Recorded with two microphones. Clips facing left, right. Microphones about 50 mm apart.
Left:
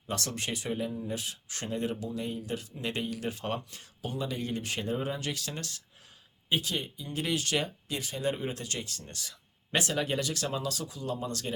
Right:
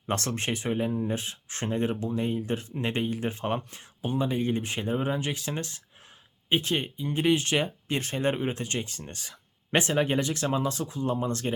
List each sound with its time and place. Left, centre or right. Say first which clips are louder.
0.1 s speech: right 5 dB; right
7.9 s speech: right 5 dB; right